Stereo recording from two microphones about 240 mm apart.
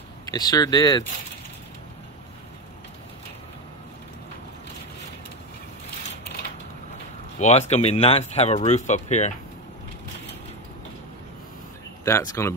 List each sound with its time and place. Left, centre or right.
0.3 s speech: centre
7.3 s speech: left
12.0 s speech: centre